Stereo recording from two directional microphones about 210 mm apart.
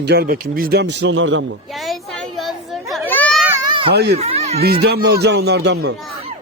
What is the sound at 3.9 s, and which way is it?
Speech, 50° right (ahead or behind).